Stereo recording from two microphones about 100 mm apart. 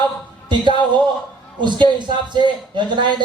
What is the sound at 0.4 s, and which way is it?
Speech, 50° right (ahead or behind).